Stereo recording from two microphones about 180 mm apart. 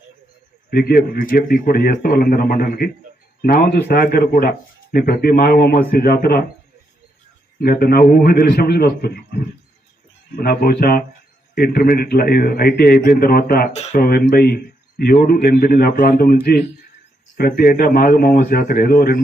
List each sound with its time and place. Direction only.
0.7 s a man's voice: 60° left (ahead or behind)
7.6 s a man's voice: 60° left (ahead or behind)